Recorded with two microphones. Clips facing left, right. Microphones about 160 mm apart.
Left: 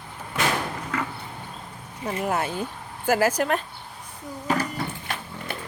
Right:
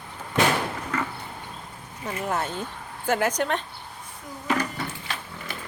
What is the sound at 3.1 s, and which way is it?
Speech, 5° left (ahead or behind).